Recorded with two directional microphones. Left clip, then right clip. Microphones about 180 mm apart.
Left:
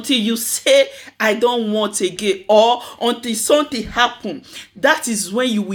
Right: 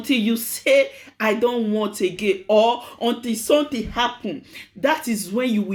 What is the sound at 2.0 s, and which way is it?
Speech, 40° left (ahead or behind).